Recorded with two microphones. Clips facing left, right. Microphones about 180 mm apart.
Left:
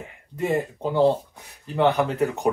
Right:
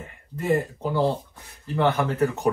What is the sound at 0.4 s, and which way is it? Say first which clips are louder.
Speech: even; 20° left (ahead or behind).